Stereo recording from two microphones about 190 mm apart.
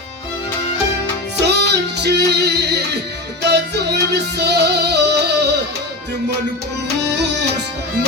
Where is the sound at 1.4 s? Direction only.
60° right (ahead or behind).